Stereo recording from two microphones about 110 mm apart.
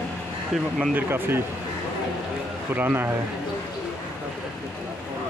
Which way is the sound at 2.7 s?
20° right (ahead or behind).